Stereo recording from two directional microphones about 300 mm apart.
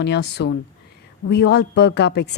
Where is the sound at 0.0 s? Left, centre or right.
Left.